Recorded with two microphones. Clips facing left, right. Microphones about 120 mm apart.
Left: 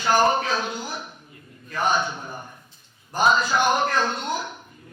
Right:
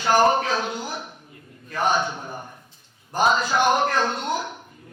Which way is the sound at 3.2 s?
65° right (ahead or behind).